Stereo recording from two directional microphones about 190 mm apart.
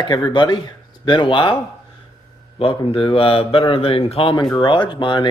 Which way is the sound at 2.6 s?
30° left (ahead or behind).